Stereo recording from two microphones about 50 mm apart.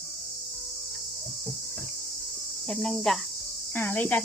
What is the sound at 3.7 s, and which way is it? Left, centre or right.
Speech, left.